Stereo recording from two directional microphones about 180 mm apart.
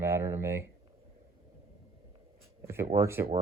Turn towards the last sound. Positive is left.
turn(degrees=-15)  # may be behind; listen again after turning